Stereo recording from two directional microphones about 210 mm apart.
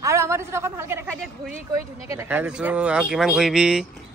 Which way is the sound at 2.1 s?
10° right (ahead or behind).